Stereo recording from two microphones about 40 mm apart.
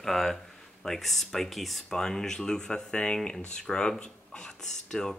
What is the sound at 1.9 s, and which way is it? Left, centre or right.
Speech, centre.